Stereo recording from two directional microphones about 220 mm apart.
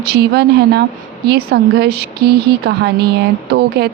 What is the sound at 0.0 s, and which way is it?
Speech, 45° right (ahead or behind).